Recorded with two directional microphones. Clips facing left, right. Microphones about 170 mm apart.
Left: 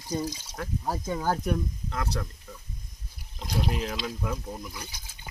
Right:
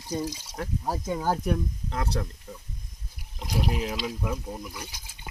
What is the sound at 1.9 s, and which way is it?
Speech, 25° right (ahead or behind).